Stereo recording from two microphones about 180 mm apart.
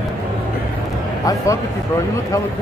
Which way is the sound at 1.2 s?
15° left (ahead or behind).